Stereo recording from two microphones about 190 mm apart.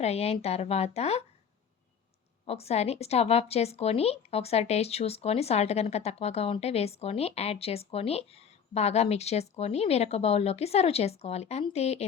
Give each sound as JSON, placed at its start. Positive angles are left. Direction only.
{"t": 0.0, "sound": "a woman's voice", "side_deg": 35}
{"t": 2.5, "sound": "a woman's voice", "side_deg": 35}